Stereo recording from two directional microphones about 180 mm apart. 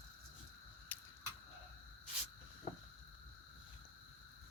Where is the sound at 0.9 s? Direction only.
10° left (ahead or behind).